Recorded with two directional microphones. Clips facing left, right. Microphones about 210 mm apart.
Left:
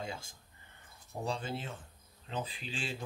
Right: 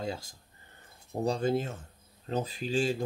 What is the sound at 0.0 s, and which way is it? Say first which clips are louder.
Speech: right 6 dB; 40° right (ahead or behind).